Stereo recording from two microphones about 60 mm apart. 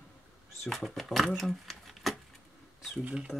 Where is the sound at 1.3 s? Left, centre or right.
Centre.